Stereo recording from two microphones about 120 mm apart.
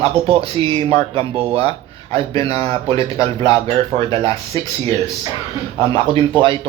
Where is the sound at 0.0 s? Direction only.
50° right (ahead or behind).